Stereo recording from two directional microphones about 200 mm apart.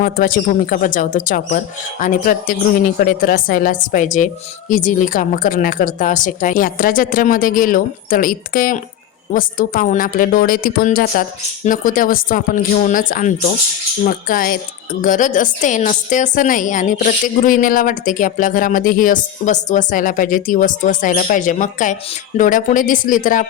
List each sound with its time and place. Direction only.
0.0 s a woman's voice: 45° left (ahead or behind)